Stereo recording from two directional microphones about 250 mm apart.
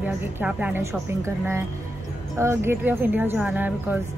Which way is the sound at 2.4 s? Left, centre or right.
Centre.